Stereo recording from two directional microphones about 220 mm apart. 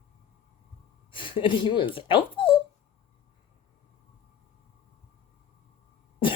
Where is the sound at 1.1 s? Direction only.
25° left (ahead or behind).